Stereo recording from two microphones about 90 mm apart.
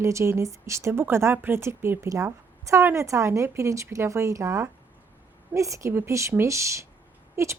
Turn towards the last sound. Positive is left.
turn(degrees=-30)  # may be behind; listen again after turning